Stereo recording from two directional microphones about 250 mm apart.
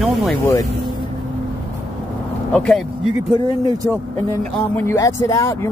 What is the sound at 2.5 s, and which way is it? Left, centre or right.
Speech, centre.